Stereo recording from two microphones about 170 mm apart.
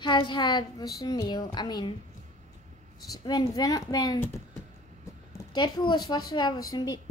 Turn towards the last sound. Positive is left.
turn(degrees=25)  # may be behind; listen again after turning